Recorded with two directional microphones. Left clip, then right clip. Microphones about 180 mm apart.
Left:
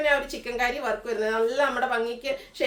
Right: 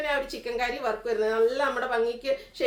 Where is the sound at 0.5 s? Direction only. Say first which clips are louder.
Left 2 dB; 15° left (ahead or behind).